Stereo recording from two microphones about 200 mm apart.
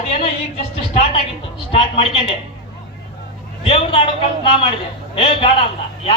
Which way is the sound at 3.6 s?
25° left (ahead or behind).